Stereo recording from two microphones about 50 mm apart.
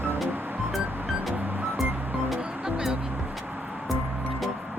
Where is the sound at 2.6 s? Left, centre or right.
Centre.